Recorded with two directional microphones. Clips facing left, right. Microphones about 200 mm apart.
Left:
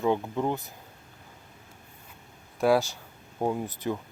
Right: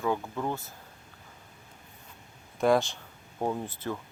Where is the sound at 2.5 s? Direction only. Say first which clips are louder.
Left 1 dB; 5° left (ahead or behind).